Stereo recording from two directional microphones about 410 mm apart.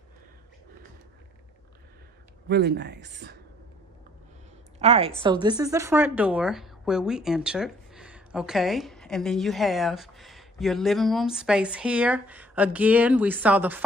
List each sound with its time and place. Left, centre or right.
2.4 s speech: right
4.7 s a woman's voice: centre